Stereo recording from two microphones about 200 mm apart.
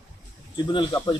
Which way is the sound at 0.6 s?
20° left (ahead or behind).